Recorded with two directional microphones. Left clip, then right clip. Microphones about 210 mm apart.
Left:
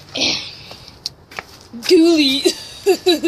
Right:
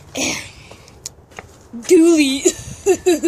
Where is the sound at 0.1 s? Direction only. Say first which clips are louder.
Left 3 dB; 55° right (ahead or behind).